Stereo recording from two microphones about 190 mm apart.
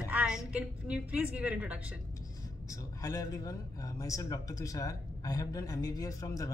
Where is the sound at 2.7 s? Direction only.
15° left (ahead or behind).